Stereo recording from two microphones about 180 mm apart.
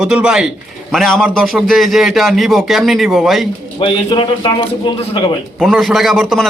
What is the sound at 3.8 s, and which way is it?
A man's voice, 25° left (ahead or behind).